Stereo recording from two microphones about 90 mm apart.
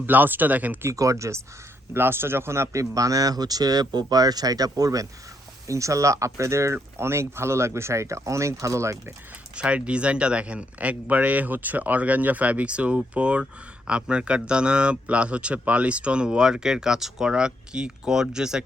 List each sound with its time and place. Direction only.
0.0 s speech: 20° right (ahead or behind)
0.9 s speech: 35° right (ahead or behind)
9.6 s a man's voice: 15° right (ahead or behind)